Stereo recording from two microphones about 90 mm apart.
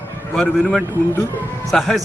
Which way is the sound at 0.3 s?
5° left (ahead or behind).